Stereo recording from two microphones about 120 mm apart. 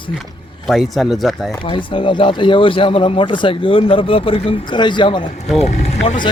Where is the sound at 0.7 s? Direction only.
Centre (ahead or behind).